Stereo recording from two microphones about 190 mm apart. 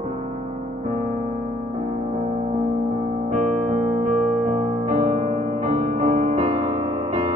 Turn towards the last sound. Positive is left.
turn(degrees=-40)  # may be behind; listen again after turning